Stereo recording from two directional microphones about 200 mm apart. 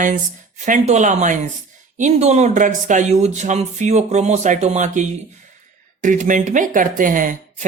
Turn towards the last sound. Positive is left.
turn(degrees=-40)  # may be behind; listen again after turning